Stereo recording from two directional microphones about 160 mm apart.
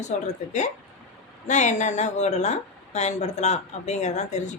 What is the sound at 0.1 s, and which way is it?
Speech, 50° left (ahead or behind).